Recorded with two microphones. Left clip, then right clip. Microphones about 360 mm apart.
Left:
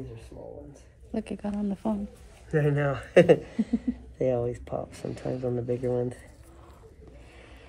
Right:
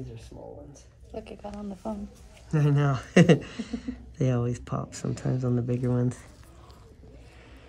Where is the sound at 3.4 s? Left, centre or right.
Right.